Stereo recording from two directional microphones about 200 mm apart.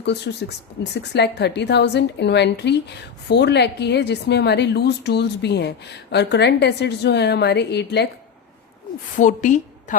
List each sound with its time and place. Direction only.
0.0 s a woman's voice: 55° left (ahead or behind)
9.1 s a woman's voice: 40° left (ahead or behind)